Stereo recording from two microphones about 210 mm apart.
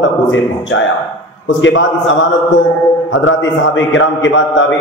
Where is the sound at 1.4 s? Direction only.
65° left (ahead or behind).